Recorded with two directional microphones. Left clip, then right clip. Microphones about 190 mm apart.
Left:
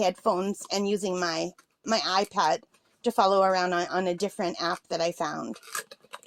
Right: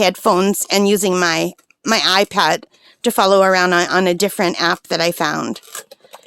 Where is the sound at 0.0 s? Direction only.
55° right (ahead or behind).